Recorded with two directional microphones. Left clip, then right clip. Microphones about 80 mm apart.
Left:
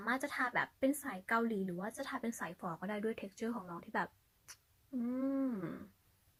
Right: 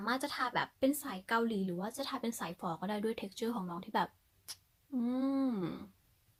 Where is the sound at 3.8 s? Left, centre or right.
Right.